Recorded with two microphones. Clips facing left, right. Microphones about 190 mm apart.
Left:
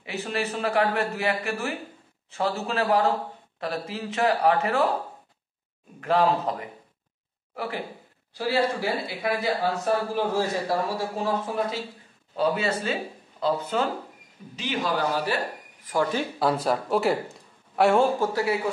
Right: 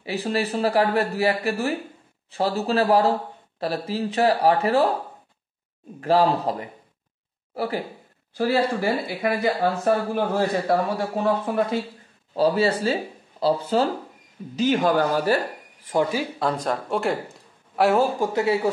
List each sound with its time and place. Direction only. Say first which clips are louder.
0.0 s speech: right 4 dB; 35° right (ahead or behind)
5.9 s speech: right 3 dB; 35° right (ahead or behind)
7.5 s speech: right 5 dB; 35° right (ahead or behind)
8.4 s speech: right 3 dB; 50° right (ahead or behind)
12.4 s speech: right 5 dB; 35° right (ahead or behind)
14.5 s a man's voice: right 8 dB; 45° right (ahead or behind)
15.8 s speech: right 3 dB; 25° right (ahead or behind)
16.3 s speech: left 1 dB; 5° left (ahead or behind)
18.2 s a woman's voice: right 3 dB; 20° right (ahead or behind)